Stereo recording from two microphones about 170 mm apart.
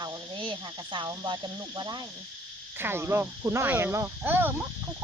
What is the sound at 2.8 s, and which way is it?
Speech, 15° right (ahead or behind).